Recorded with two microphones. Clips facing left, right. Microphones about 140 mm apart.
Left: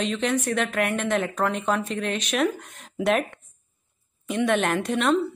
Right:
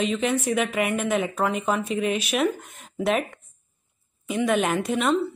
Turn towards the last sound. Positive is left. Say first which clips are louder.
# even
turn(degrees=0)  # may be behind; listen again after turning